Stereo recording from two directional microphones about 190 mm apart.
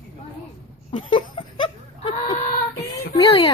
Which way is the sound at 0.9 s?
30° left (ahead or behind).